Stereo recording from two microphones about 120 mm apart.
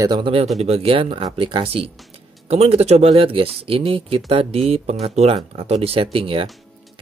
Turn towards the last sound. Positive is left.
turn(degrees=-50)  # may be behind; listen again after turning